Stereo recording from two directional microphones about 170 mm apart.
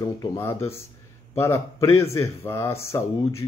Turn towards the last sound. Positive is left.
turn(degrees=15)  # may be behind; listen again after turning